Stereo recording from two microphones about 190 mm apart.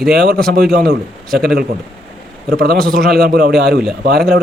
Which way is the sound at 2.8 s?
Centre (ahead or behind).